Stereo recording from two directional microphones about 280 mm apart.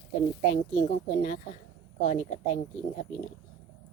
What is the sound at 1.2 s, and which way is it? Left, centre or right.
Speech, left.